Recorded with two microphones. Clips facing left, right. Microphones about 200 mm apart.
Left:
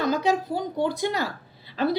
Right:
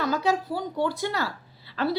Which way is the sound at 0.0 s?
20° left (ahead or behind).